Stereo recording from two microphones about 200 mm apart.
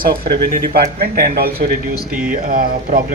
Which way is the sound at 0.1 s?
50° right (ahead or behind).